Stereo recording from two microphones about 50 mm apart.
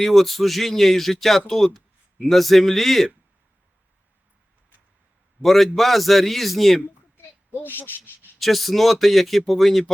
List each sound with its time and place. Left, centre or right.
0.0 s speech: centre
5.4 s a man's voice: centre
7.5 s speech: left
8.4 s speech: centre